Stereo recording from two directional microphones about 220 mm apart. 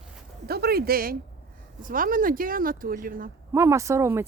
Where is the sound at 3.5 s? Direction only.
15° right (ahead or behind).